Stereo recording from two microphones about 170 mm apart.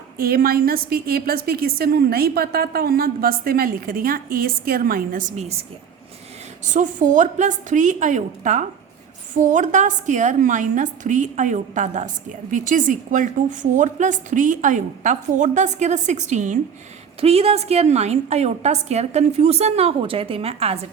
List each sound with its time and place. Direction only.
0.2 s a woman's voice: 60° right (ahead or behind); by 5.6 s 40° right (ahead or behind)
6.7 s a woman's voice: 45° right (ahead or behind)